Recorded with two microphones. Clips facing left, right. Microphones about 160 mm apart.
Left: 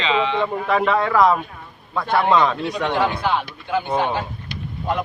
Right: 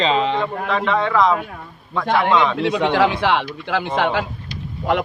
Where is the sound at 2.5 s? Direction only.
90° right.